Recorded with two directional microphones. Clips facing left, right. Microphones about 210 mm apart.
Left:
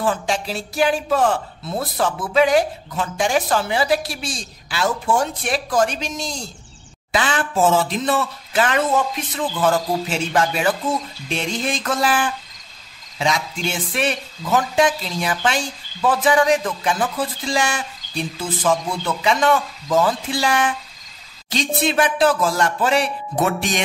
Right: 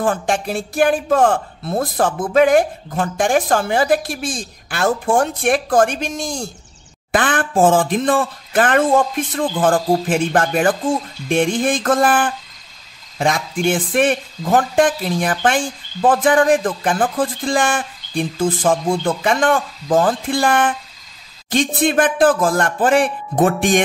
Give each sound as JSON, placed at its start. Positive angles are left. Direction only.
{"t": 0.0, "sound": "speech", "side_deg": -50}